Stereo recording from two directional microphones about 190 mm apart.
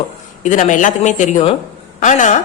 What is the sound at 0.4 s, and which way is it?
A woman's voice, 40° left (ahead or behind).